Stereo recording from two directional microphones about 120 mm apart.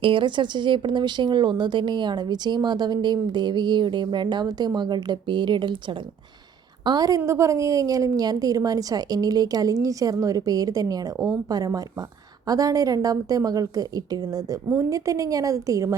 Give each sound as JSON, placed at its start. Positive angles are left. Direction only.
{"t": 0.0, "sound": "speech", "side_deg": -45}
{"t": 6.8, "sound": "a woman's voice", "side_deg": -35}